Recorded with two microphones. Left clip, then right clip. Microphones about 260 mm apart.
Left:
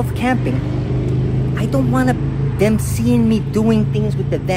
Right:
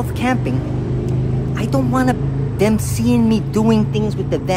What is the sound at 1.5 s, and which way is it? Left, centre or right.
Speech, centre.